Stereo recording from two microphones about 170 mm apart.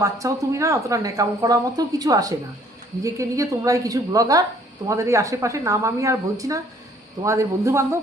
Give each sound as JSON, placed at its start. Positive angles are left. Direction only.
{"t": 0.0, "sound": "a man's voice", "side_deg": -20}